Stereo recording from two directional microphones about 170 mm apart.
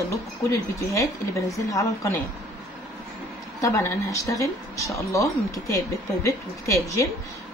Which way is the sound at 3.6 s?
15° left (ahead or behind).